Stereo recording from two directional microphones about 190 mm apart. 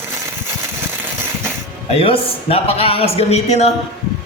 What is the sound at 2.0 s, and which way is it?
Speech, 30° left (ahead or behind).